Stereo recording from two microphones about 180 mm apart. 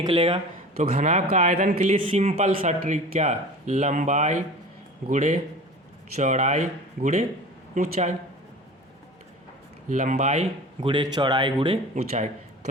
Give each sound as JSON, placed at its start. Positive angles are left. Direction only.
{"t": 0.0, "sound": "speech", "side_deg": -30}
{"t": 0.9, "sound": "speech", "side_deg": -45}
{"t": 2.0, "sound": "speech", "side_deg": -30}
{"t": 9.9, "sound": "speech", "side_deg": -40}